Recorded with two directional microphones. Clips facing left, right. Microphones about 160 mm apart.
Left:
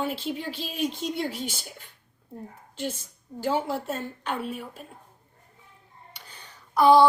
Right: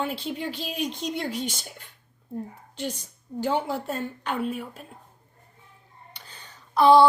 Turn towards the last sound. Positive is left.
turn(degrees=20)  # may be behind; listen again after turning